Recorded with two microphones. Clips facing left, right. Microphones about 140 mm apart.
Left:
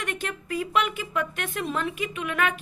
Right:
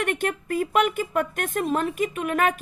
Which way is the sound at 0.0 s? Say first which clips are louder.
Right 7 dB; 55° right (ahead or behind).